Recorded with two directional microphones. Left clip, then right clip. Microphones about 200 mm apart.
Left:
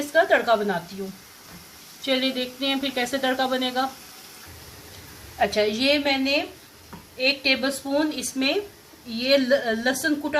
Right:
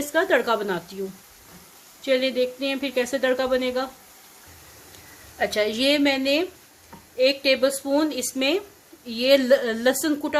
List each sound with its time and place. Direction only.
0.1 s a woman's voice: 45° right (ahead or behind)
2.0 s speech: 30° right (ahead or behind)
5.5 s a woman's voice: 50° right (ahead or behind)